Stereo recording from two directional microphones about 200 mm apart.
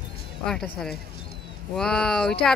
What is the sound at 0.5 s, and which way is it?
Speech, 5° left (ahead or behind).